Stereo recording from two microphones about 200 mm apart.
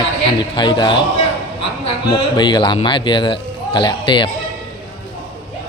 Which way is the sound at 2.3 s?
20° left (ahead or behind).